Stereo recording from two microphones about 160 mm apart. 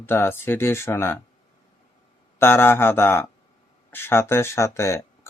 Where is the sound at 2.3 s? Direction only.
15° left (ahead or behind).